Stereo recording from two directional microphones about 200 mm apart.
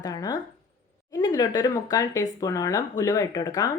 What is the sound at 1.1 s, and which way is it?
A woman's voice, 20° left (ahead or behind).